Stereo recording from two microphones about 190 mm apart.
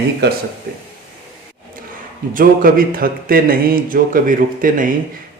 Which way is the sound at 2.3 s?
50° right (ahead or behind).